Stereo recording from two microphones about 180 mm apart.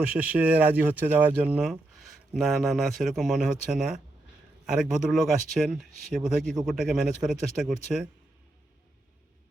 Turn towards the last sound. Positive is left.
turn(degrees=0)  # may be behind; listen again after turning